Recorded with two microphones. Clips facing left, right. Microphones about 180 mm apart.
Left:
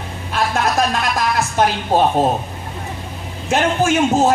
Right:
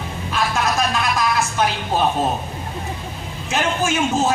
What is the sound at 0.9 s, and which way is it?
A man's voice, 45° left (ahead or behind).